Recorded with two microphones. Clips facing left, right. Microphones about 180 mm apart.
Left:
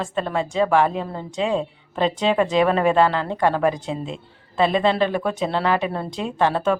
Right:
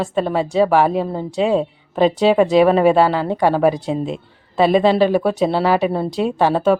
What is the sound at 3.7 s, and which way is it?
Speech, 40° right (ahead or behind).